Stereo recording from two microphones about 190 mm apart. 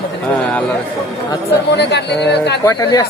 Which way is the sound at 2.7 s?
20° left (ahead or behind).